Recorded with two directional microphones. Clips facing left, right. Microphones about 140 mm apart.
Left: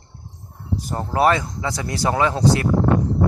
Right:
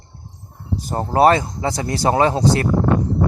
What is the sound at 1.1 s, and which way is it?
Speech, 35° right (ahead or behind).